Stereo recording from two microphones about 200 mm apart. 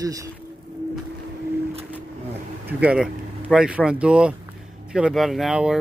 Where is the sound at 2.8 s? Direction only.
5° right (ahead or behind).